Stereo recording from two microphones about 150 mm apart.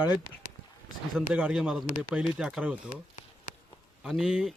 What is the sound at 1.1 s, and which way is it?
Speech, 5° right (ahead or behind).